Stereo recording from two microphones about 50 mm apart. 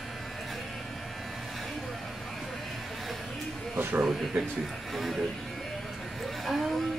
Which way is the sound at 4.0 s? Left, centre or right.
Centre.